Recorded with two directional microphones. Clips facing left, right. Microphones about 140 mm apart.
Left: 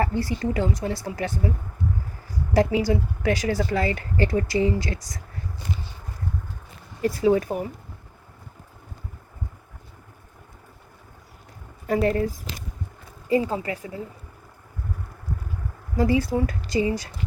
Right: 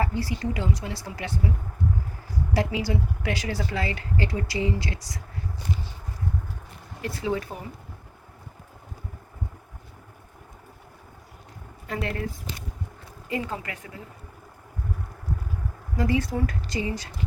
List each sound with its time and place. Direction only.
0.0 s a woman's voice: 50° left (ahead or behind)
2.5 s a woman's voice: 45° left (ahead or behind)
7.0 s a woman's voice: 40° left (ahead or behind)
11.9 s a woman's voice: 35° left (ahead or behind)
16.0 s a woman's voice: 30° left (ahead or behind)